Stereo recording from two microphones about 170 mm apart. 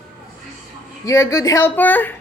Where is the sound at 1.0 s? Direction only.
20° left (ahead or behind).